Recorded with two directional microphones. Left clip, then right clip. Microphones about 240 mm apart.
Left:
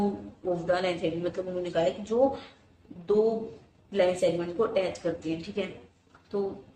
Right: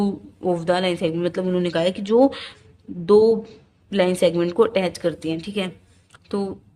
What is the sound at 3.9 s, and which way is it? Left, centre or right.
Speech, right.